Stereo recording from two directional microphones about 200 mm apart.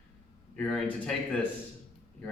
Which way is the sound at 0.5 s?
5° left (ahead or behind).